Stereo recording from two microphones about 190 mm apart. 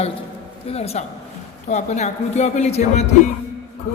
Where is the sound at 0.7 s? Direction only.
35° left (ahead or behind).